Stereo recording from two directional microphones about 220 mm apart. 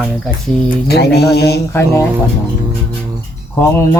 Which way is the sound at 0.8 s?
45° left (ahead or behind).